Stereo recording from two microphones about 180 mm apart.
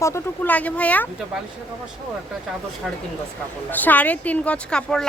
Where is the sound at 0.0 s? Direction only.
10° left (ahead or behind).